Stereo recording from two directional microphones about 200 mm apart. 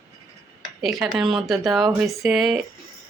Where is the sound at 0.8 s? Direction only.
Centre (ahead or behind).